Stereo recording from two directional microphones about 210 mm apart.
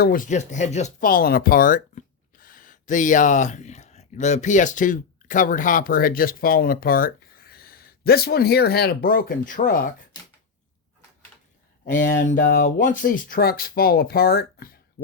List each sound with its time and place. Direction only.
0.0 s speech: 40° left (ahead or behind)
12.2 s speech: 40° left (ahead or behind)
15.0 s speech: 60° left (ahead or behind)